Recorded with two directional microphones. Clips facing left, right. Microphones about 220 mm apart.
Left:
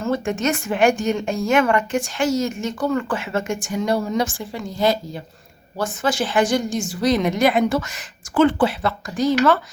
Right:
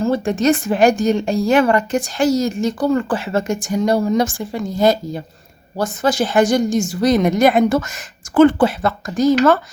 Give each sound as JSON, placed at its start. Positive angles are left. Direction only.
{"t": 0.0, "sound": "a woman's voice", "side_deg": -35}